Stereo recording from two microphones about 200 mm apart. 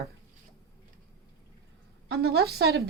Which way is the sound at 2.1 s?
55° right (ahead or behind).